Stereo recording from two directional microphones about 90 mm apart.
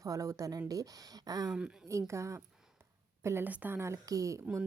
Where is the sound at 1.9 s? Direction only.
35° right (ahead or behind).